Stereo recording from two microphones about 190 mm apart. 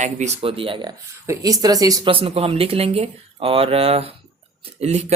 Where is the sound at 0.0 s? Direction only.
35° right (ahead or behind).